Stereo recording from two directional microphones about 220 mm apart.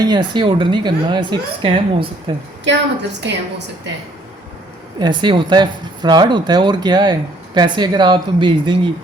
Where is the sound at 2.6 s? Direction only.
50° right (ahead or behind).